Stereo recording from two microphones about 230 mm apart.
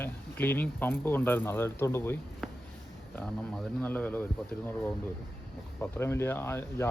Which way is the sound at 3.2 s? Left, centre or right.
Centre.